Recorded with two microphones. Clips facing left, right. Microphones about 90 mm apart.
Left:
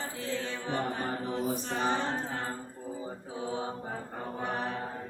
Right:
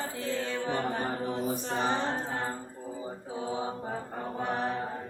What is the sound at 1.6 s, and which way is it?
A capella, 30° right (ahead or behind).